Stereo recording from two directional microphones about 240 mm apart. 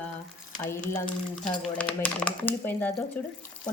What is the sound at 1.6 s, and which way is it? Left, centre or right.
Speech, centre.